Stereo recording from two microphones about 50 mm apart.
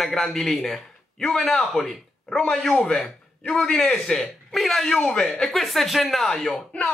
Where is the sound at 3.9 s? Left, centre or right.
Centre.